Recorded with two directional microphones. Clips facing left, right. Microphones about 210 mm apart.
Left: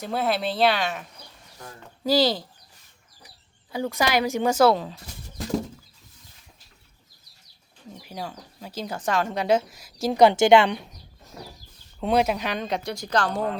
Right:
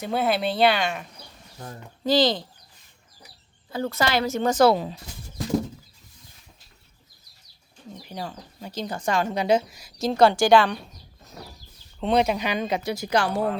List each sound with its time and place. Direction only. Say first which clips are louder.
0.0 s speech: right 2 dB; centre (ahead or behind)
2.0 s a woman's voice: even; 10° left (ahead or behind)
3.7 s a woman's voice: even; 15° left (ahead or behind)
4.7 s speech: right 1 dB; 10° right (ahead or behind)
8.0 s speech: even; 5° left (ahead or behind)
10.1 s speech: left 1 dB; 20° left (ahead or behind)
11.9 s speech: even; 5° left (ahead or behind)